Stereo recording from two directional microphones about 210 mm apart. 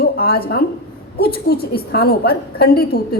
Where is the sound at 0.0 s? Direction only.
45° left (ahead or behind).